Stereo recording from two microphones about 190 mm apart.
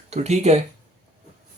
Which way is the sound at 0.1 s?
35° right (ahead or behind).